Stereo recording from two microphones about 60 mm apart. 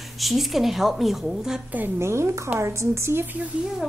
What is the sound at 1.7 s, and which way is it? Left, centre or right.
A woman's voice, right.